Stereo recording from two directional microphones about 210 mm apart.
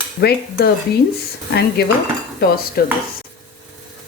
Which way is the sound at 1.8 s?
50° left (ahead or behind).